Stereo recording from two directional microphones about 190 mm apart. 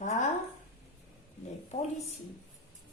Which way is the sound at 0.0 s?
40° left (ahead or behind).